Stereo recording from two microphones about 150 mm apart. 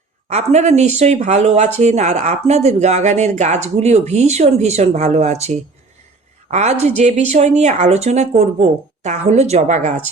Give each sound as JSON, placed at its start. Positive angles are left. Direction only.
{"t": 0.3, "sound": "speech", "side_deg": -50}
{"t": 6.5, "sound": "speech", "side_deg": -50}